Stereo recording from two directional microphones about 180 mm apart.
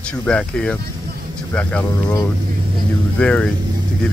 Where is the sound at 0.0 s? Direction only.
5° left (ahead or behind).